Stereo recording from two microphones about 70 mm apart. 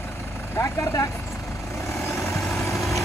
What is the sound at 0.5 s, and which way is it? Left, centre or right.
Speech, left.